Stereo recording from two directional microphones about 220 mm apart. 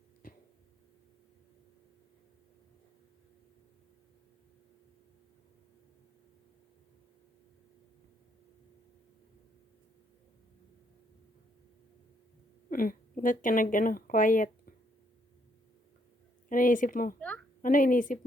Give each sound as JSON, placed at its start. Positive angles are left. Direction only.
{"t": 0.2, "sound": "a sound", "side_deg": 40}
{"t": 12.7, "sound": "a woman's voice", "side_deg": 40}
{"t": 16.5, "sound": "a woman's voice", "side_deg": 40}
{"t": 17.2, "sound": "a woman's voice", "side_deg": 5}
{"t": 17.6, "sound": "a woman's voice", "side_deg": 40}